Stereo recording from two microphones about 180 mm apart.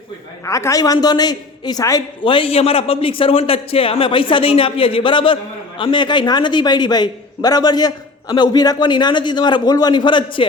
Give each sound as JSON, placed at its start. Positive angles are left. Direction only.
{"t": 0.4, "sound": "a man's voice", "side_deg": 15}